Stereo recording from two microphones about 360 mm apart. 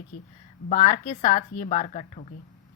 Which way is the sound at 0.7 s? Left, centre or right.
Centre.